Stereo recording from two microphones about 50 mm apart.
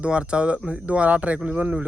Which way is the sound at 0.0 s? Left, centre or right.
Right.